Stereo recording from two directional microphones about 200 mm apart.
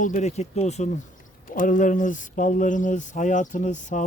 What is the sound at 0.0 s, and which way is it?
Speech, 40° left (ahead or behind).